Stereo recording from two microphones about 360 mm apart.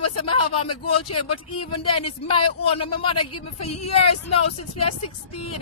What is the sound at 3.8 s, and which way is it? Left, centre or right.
Speech, left.